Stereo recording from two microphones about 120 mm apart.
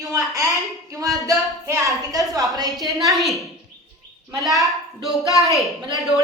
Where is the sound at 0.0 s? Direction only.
30° right (ahead or behind).